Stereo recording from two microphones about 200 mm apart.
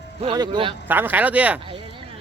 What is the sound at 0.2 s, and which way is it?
Speech, 25° right (ahead or behind).